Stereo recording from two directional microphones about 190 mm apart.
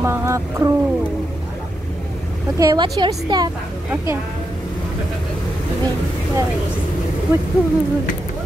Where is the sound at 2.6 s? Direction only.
20° right (ahead or behind).